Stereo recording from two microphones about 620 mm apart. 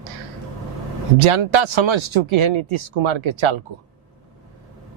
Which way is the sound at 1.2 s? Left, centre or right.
Right.